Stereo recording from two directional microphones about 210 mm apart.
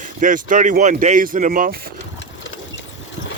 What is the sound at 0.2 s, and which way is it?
Speech, 40° right (ahead or behind).